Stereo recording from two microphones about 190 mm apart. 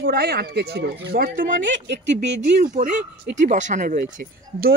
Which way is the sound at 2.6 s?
45° right (ahead or behind).